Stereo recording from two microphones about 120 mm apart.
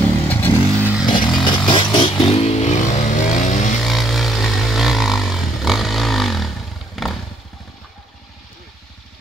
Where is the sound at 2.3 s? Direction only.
65° left (ahead or behind); by 3.6 s 90° left.